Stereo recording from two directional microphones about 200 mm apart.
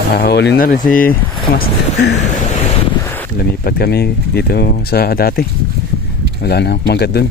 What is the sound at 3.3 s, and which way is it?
Speech, 50° left (ahead or behind).